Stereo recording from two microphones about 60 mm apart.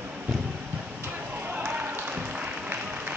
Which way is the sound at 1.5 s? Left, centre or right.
Right.